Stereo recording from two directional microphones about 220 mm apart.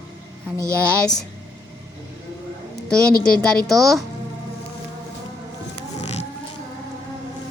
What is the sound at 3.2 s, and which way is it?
Speech, 40° left (ahead or behind).